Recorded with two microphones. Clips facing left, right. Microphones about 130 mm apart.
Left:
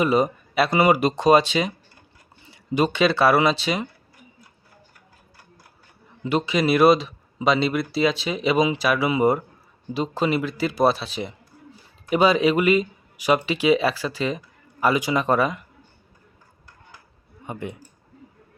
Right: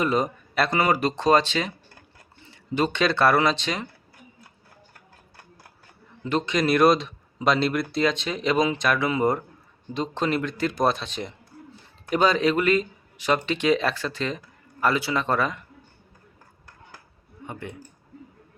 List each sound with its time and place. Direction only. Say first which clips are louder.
0.0 s speech: left 4 dB; 10° left (ahead or behind)
6.2 s a man's voice: left 2 dB; 10° left (ahead or behind)
17.4 s speech: left 4 dB; 15° left (ahead or behind)